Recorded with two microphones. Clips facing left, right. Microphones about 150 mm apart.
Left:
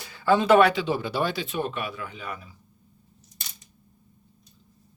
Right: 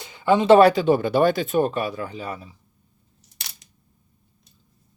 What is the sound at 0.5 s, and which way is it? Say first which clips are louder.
Speech: right 7 dB; 40° right (ahead or behind).